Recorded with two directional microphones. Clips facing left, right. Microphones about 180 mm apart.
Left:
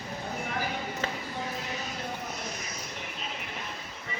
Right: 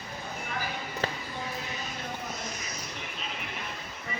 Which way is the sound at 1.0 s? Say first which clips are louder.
Right 3 dB; 35° right (ahead or behind).